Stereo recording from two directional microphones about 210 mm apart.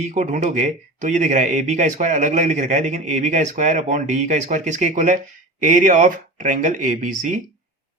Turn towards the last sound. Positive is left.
turn(degrees=-40)  # may be behind; listen again after turning